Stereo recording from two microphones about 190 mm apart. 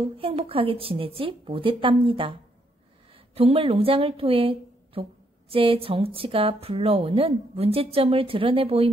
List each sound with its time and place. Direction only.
0.0 s a woman's voice: 30° right (ahead or behind)
3.3 s a woman's voice: 30° right (ahead or behind)